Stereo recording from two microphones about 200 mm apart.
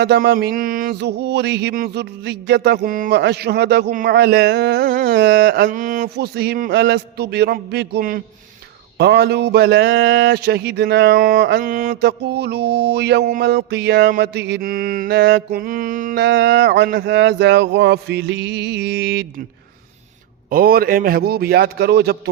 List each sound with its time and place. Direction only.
0.0 s mantra: 55° right (ahead or behind)
9.0 s speech: 55° right (ahead or behind)
20.5 s mantra: 50° right (ahead or behind)